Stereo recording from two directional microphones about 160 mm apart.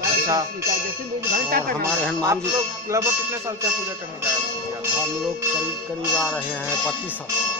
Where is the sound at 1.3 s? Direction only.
70° right (ahead or behind).